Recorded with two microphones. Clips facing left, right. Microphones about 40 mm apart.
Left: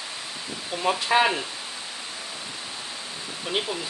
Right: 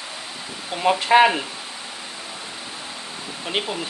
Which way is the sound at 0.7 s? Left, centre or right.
Right.